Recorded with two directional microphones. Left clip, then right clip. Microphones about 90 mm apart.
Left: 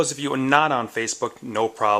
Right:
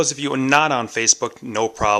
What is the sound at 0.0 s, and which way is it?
Speech, 25° right (ahead or behind).